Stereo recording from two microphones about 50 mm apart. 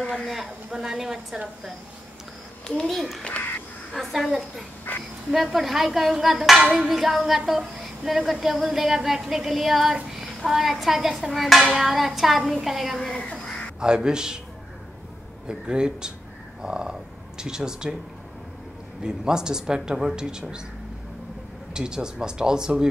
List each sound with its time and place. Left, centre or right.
0.1 s speech: centre
2.8 s speech: centre
4.9 s speech: left
5.3 s speech: centre
13.7 s speech: centre
15.4 s speech: centre
19.0 s speech: centre
21.7 s speech: centre